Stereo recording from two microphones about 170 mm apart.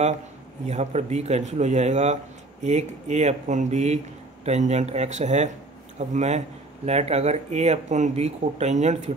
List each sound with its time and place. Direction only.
0.7 s speech: 40° right (ahead or behind)